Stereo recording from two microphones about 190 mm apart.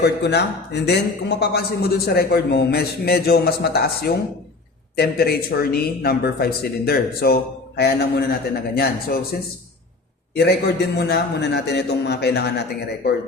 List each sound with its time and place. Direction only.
0.0 s a man's voice: 60° left (ahead or behind)
10.3 s a man's voice: 60° left (ahead or behind)